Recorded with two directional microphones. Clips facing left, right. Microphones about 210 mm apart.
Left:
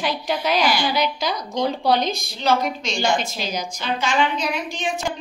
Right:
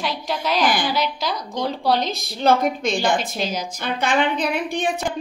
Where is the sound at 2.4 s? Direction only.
50° right (ahead or behind).